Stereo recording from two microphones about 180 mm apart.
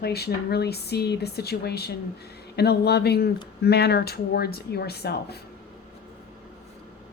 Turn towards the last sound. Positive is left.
turn(degrees=65)  # may be behind; listen again after turning